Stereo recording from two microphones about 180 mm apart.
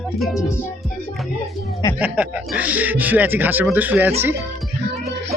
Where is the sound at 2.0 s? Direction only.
10° right (ahead or behind).